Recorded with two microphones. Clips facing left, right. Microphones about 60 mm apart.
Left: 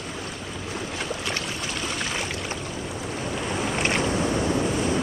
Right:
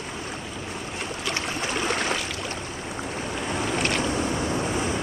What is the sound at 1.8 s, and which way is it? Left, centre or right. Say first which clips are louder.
Boat: right 4 dB; right.